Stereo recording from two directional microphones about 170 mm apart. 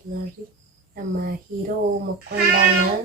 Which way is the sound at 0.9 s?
55° right (ahead or behind).